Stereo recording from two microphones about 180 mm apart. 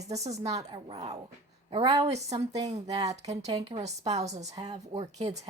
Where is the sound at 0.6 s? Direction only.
25° right (ahead or behind).